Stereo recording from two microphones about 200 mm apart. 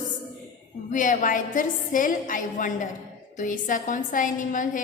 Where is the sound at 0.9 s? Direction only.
40° left (ahead or behind).